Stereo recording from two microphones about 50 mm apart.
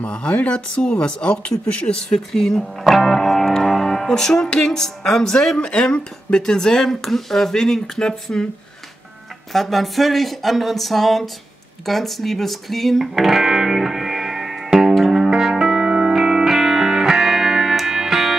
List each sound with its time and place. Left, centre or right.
0.0 s speech: left
2.0 s speech: centre
9.5 s speech: centre
13.0 s music: centre